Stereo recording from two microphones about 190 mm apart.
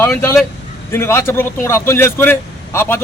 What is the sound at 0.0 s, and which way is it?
A man's voice, 10° left (ahead or behind).